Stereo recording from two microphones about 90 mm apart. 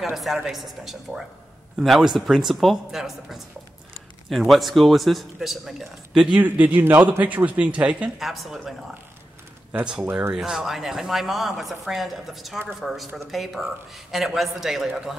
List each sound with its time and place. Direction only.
0.1 s a woman's voice: 5° right (ahead or behind)
6.4 s speech: 20° right (ahead or behind)
8.2 s a woman's voice: centre (ahead or behind)
10.3 s a woman's voice: 5° right (ahead or behind)